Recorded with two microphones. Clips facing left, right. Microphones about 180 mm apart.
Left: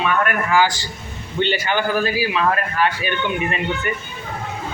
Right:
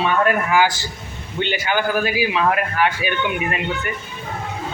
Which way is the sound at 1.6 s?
10° right (ahead or behind).